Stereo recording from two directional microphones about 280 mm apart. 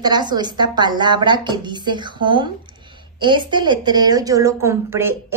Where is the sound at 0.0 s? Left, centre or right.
Centre.